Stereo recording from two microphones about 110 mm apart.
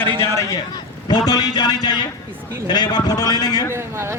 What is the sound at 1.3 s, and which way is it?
A man's voice, 40° left (ahead or behind).